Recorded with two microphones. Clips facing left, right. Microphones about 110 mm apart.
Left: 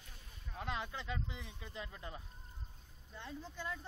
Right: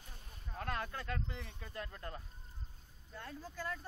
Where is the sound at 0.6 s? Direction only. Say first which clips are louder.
Right 1 dB; 10° left (ahead or behind).